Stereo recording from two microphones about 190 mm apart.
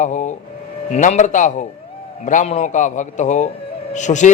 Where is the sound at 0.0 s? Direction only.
40° left (ahead or behind).